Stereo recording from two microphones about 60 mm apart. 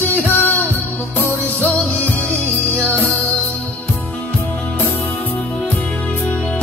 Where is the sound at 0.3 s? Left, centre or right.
Left.